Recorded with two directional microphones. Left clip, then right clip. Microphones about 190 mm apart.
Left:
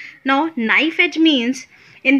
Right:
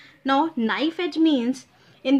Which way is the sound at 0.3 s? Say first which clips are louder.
Left 6 dB; 15° left (ahead or behind).